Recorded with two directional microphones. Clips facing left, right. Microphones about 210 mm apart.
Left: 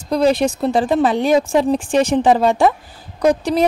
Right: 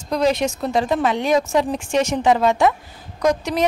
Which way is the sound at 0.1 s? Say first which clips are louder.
Left 4 dB; 35° left (ahead or behind).